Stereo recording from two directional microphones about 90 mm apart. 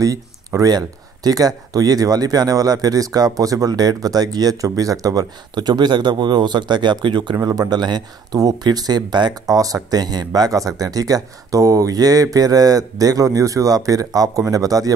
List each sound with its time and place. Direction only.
0.0 s speech: 40° right (ahead or behind); by 7.3 s 60° right (ahead or behind)
7.3 s speech: 40° right (ahead or behind)
9.6 s speech: 40° right (ahead or behind)